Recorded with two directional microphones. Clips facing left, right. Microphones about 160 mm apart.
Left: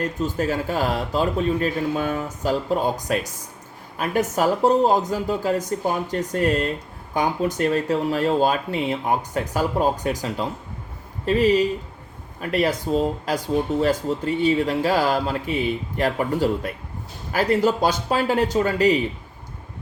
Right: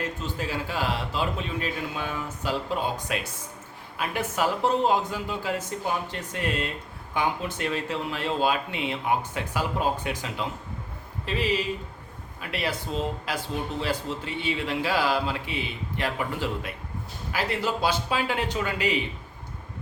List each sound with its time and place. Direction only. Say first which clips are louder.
0.0 s speech: left 8 dB; 45° left (ahead or behind)